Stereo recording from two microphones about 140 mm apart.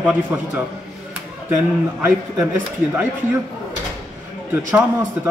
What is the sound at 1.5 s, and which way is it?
Speech, 15° right (ahead or behind).